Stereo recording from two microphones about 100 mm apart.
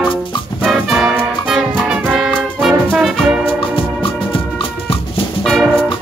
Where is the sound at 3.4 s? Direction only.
60° left (ahead or behind).